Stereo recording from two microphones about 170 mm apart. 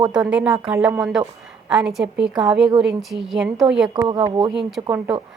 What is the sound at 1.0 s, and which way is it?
A woman's voice, centre (ahead or behind).